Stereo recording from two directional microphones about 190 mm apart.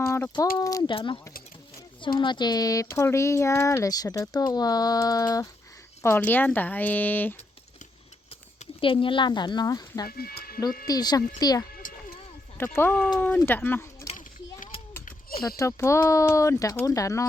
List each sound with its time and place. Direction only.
0.0 s speech: 15° left (ahead or behind)
8.5 s speech: 30° left (ahead or behind)
10.1 s speech: 55° left (ahead or behind)
10.8 s speech: 20° left (ahead or behind)
11.8 s a sound: 45° left (ahead or behind)
12.5 s speech: 10° left (ahead or behind)
15.0 s a sound: 50° left (ahead or behind)
15.4 s speech: 15° left (ahead or behind)